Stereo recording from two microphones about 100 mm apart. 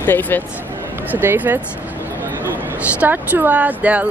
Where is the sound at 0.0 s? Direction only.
20° left (ahead or behind).